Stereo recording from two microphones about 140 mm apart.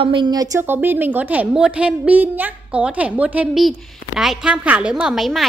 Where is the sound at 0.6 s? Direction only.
15° right (ahead or behind).